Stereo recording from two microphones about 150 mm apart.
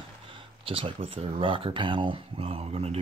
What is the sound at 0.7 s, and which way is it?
Speech, 35° right (ahead or behind).